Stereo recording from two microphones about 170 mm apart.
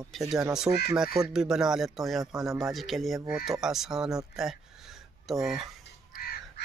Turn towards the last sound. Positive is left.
turn(degrees=60)  # may be behind; listen again after turning